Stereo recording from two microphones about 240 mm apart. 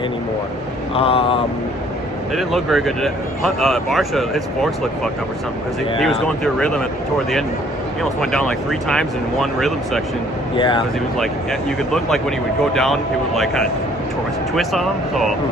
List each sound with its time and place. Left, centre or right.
0.9 s vehicle: left
2.3 s speech: centre
6.0 s speech: centre
8.2 s speech: centre
10.6 s vehicle: centre
11.9 s speech: centre